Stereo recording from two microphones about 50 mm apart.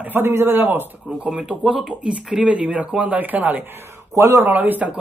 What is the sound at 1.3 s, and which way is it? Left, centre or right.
A man's voice, centre.